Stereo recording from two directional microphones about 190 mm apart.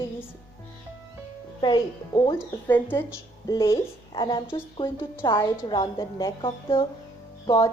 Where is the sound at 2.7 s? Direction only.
10° left (ahead or behind).